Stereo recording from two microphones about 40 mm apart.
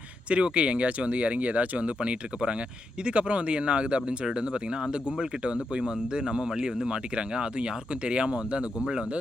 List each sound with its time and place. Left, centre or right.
0.3 s speech: right